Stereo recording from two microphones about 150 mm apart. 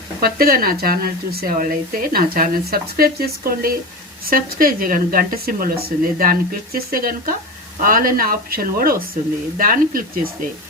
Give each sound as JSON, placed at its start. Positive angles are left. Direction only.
{"t": 0.2, "sound": "speech", "side_deg": -75}